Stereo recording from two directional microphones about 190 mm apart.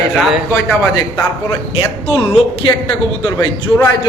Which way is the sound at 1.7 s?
30° left (ahead or behind).